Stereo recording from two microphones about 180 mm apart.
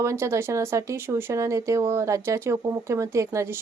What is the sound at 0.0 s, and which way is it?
Speech, 15° right (ahead or behind).